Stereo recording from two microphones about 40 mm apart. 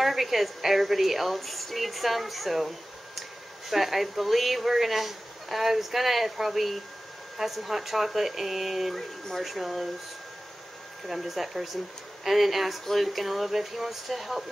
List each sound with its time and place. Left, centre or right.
0.0 s a woman's voice: centre
3.7 s a woman's voice: centre
11.1 s a woman's voice: centre